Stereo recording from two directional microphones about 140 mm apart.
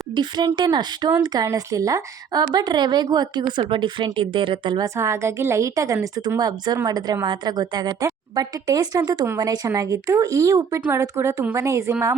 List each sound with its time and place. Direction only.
0.1 s a woman's voice: 30° right (ahead or behind)
4.9 s a woman's voice: 20° right (ahead or behind)